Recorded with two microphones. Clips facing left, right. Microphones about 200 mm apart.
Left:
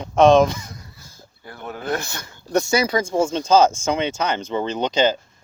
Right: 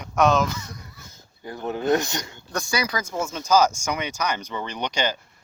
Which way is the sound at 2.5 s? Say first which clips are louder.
Left 8 dB; 25° left (ahead or behind).